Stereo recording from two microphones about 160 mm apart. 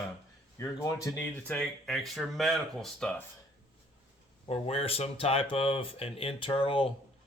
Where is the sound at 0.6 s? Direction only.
20° left (ahead or behind); by 3.2 s 5° left (ahead or behind).